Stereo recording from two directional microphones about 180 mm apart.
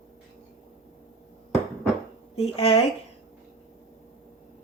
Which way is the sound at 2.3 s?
35° left (ahead or behind).